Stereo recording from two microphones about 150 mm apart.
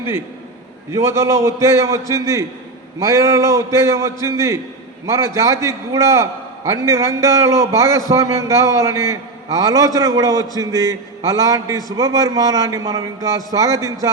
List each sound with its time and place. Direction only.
0.9 s a man's voice: 20° right (ahead or behind)